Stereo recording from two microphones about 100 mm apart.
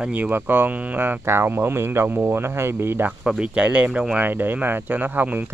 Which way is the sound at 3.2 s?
10° right (ahead or behind).